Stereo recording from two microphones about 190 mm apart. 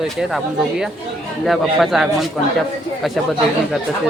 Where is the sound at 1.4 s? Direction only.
Centre (ahead or behind).